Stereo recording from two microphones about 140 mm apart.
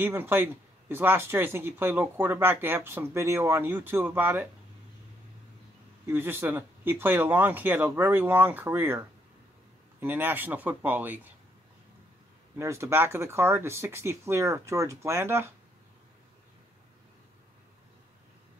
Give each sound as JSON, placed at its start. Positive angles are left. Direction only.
{"t": 0.0, "sound": "speech", "side_deg": -15}
{"t": 6.0, "sound": "speech", "side_deg": -15}
{"t": 12.5, "sound": "speech", "side_deg": -20}